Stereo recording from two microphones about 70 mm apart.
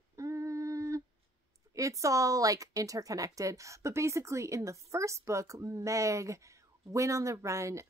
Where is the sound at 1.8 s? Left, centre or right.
Right.